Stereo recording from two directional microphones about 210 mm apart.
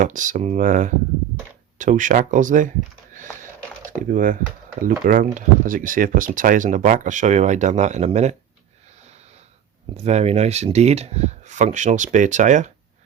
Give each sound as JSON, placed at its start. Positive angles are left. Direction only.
{"t": 0.0, "sound": "speech", "side_deg": -40}
{"t": 4.1, "sound": "speech", "side_deg": -40}
{"t": 10.0, "sound": "speech", "side_deg": -30}